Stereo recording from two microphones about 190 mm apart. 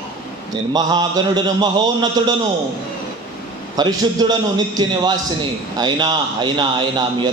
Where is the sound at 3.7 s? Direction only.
20° right (ahead or behind).